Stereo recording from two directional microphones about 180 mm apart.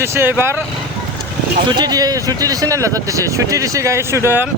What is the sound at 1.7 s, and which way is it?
Speech, 20° right (ahead or behind).